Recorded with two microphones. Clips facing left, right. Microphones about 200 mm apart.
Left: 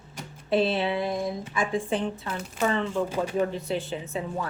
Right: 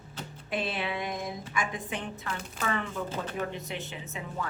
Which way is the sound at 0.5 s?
30° left (ahead or behind).